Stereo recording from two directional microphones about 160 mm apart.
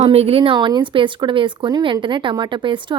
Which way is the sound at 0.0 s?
40° right (ahead or behind).